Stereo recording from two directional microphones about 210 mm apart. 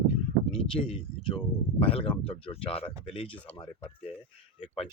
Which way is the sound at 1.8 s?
25° left (ahead or behind).